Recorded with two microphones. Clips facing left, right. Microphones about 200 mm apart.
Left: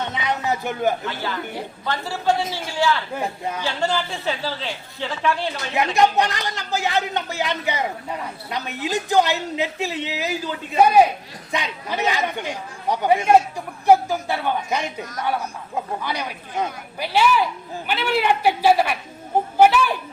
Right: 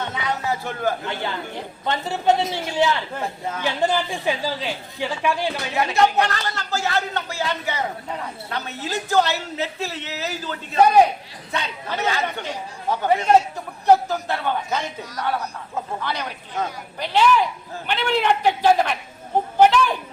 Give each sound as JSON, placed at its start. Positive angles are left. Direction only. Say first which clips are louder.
{"t": 0.1, "sound": "music", "louder": "left 1 dB", "side_deg": 20}
{"t": 1.0, "sound": "a man's voice", "louder": "even", "side_deg": -20}
{"t": 3.2, "sound": "a woman's voice", "louder": "left 1 dB", "side_deg": 15}
{"t": 3.6, "sound": "a woman's voice", "louder": "right 3 dB", "side_deg": -15}
{"t": 5.7, "sound": "a woman's voice", "louder": "left 1 dB", "side_deg": 15}
{"t": 19.5, "sound": "a sound", "louder": "even", "side_deg": 10}